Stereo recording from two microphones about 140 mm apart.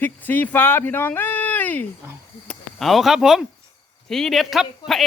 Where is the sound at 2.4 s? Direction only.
Centre (ahead or behind).